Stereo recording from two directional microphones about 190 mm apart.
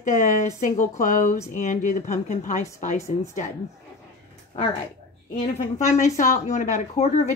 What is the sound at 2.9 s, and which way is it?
Speech, 15° left (ahead or behind).